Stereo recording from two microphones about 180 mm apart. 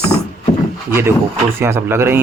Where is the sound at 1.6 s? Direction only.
15° right (ahead or behind).